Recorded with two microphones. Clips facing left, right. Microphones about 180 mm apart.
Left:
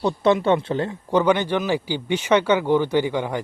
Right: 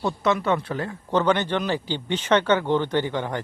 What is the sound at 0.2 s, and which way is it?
Speech, 30° left (ahead or behind).